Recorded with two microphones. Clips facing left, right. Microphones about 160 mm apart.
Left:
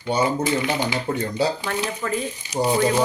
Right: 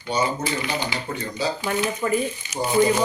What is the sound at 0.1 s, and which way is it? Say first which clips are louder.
Speech: left 2 dB; 55° left (ahead or behind).